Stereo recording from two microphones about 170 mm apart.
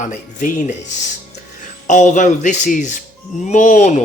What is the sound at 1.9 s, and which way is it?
Speech, 45° left (ahead or behind).